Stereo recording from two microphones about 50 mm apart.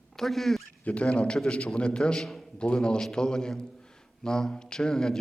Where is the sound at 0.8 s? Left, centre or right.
Left.